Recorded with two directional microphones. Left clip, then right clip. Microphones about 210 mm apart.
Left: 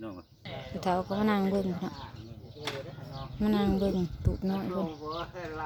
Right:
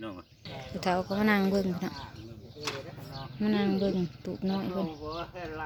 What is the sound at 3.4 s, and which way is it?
Speech, centre (ahead or behind).